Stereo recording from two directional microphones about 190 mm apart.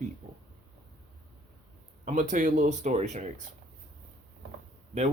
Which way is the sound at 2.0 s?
40° right (ahead or behind).